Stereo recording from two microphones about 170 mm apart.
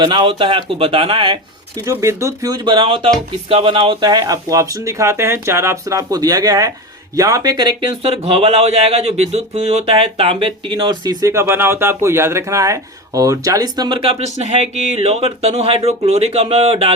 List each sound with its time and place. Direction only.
0.0 s speech: 30° right (ahead or behind)
1.8 s speech: 15° right (ahead or behind); by 16.9 s 35° right (ahead or behind)